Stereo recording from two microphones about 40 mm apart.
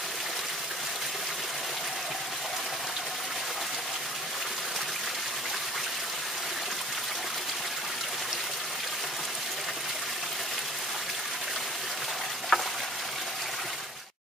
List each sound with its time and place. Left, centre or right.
12.5 s frying: left